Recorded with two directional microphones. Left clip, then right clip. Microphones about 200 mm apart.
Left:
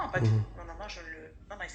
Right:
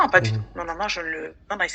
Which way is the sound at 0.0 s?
45° right (ahead or behind).